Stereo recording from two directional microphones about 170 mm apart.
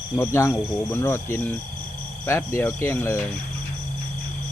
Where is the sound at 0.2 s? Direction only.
15° left (ahead or behind).